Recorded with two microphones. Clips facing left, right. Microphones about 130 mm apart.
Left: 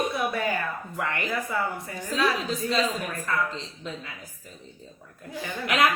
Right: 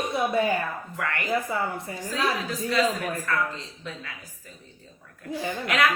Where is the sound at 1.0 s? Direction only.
25° left (ahead or behind).